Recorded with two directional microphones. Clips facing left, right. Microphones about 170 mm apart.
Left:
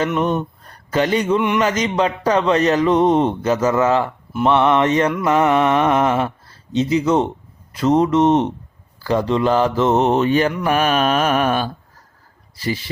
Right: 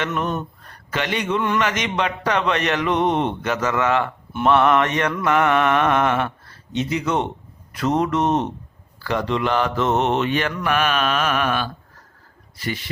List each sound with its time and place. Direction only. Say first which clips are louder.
0.6 s a sound: left 7 dB; 40° left (ahead or behind)
1.4 s a man's voice: left 3 dB; 15° left (ahead or behind)
1.6 s a man's voice: left 5 dB; 35° left (ahead or behind)
10.6 s mantra: left 4 dB; 40° left (ahead or behind)